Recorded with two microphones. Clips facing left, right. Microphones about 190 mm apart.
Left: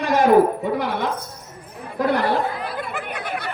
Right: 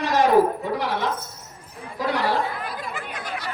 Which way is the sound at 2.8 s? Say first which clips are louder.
Left 4 dB; 60° left (ahead or behind).